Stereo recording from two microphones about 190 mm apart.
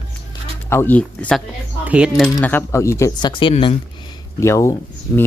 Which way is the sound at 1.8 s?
5° right (ahead or behind).